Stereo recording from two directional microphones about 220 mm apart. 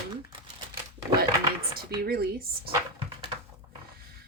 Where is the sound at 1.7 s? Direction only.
45° right (ahead or behind).